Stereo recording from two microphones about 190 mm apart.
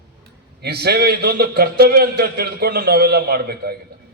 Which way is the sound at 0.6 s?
55° right (ahead or behind).